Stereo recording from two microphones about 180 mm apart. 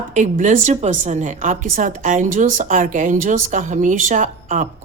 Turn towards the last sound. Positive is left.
turn(degrees=-45)  # may be behind; listen again after turning